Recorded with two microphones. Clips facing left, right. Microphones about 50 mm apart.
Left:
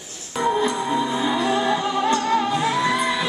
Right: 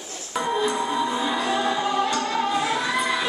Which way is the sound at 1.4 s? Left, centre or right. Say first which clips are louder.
Left 2 dB; left.